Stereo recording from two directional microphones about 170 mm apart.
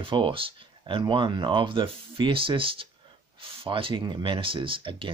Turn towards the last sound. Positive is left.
turn(degrees=-30)  # may be behind; listen again after turning